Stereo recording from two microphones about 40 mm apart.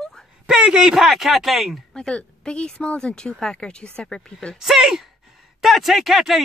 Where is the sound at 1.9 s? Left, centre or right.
Left.